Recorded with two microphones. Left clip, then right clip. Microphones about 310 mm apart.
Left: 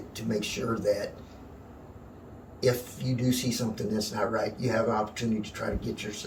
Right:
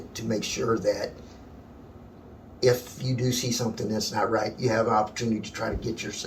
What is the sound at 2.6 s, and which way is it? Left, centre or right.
Speech, centre.